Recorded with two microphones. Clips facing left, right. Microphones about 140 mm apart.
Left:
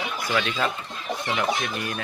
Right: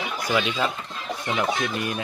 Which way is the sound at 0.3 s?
10° right (ahead or behind).